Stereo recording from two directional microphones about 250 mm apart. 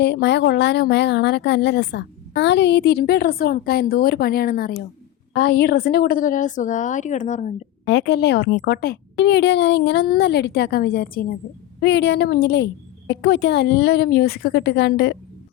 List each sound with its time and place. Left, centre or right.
0.0 s a woman's voice: left
7.9 s a woman's voice: left